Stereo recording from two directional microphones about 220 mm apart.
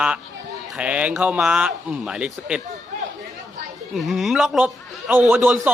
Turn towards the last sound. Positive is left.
turn(degrees=-5)  # may be behind; listen again after turning